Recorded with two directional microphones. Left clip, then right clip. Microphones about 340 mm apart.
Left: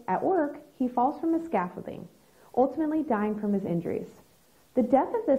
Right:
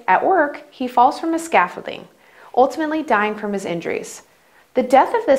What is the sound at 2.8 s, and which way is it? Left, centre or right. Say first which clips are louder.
A woman's voice: right 10 dB; centre.